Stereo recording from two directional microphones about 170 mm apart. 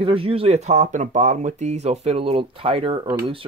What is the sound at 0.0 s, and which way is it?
Speech, 35° right (ahead or behind).